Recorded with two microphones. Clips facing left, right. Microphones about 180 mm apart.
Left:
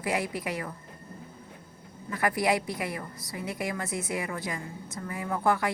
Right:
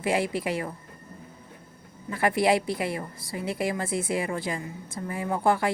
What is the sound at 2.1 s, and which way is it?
Speech, 25° right (ahead or behind).